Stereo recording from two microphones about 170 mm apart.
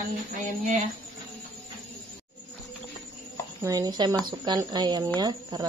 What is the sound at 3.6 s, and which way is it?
Speech, 20° right (ahead or behind).